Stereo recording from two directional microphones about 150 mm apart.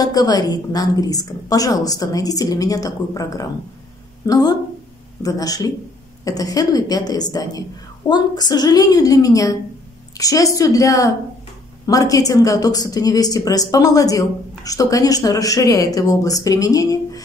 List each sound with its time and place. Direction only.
0.0 s a woman's voice: 25° left (ahead or behind)